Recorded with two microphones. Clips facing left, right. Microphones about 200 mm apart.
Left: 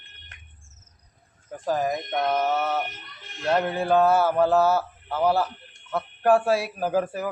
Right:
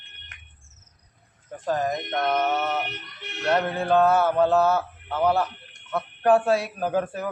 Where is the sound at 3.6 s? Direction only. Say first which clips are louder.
Even; 10° left (ahead or behind).